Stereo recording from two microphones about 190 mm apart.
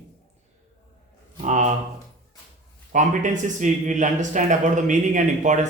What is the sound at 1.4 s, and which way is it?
Speech, 40° right (ahead or behind).